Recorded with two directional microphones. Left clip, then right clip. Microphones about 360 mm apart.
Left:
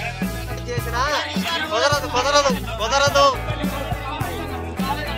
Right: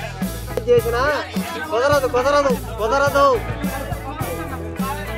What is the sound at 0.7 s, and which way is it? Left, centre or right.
Speech, right.